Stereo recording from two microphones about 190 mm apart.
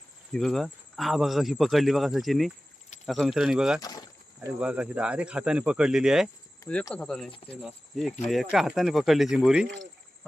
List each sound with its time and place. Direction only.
0.3 s speech: centre (ahead or behind)
3.8 s a sound: 20° left (ahead or behind)
4.4 s speech: 5° right (ahead or behind)
7.3 s cricket: 30° left (ahead or behind)
7.5 s speech: centre (ahead or behind)